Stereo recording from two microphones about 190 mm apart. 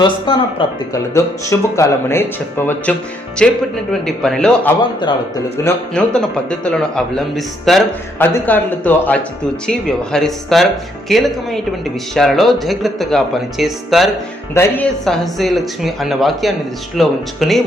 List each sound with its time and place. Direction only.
0.6 s speech: 25° left (ahead or behind)
1.1 s a man's voice: 15° left (ahead or behind); by 14.1 s centre (ahead or behind)
14.5 s speech: 15° left (ahead or behind)
15.0 s a man's voice: centre (ahead or behind)